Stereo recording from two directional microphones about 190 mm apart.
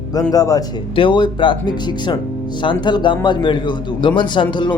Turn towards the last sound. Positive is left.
turn(degrees=25)  # may be behind; listen again after turning